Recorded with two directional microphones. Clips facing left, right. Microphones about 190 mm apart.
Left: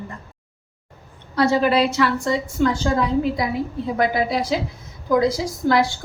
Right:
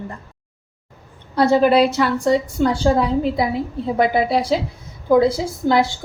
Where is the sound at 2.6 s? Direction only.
35° right (ahead or behind).